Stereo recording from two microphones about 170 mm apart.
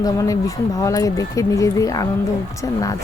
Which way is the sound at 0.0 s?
20° left (ahead or behind).